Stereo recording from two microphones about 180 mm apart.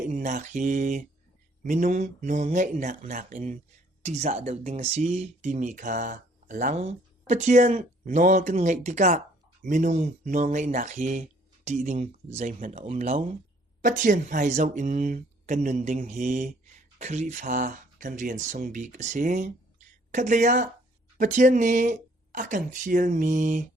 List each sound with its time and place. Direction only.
0.1 s speech: 45° right (ahead or behind)